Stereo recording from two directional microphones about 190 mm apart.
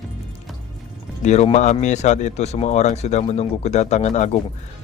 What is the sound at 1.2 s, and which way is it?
Speech, 35° left (ahead or behind).